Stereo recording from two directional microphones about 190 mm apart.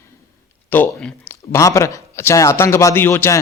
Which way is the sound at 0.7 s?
10° left (ahead or behind).